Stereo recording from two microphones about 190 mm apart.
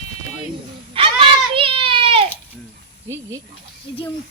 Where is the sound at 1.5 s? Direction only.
30° right (ahead or behind).